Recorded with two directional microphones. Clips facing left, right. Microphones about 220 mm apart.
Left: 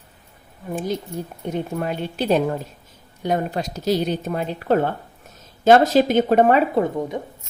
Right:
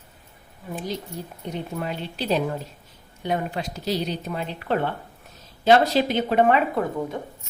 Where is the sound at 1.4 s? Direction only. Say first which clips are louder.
Left 5 dB; 50° left (ahead or behind).